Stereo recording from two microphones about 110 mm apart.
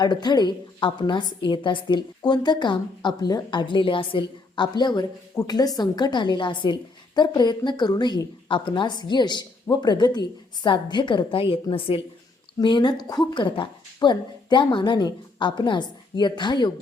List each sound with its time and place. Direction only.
0.0 s a woman's voice: 40° left (ahead or behind)
12.5 s a woman's voice: 45° left (ahead or behind)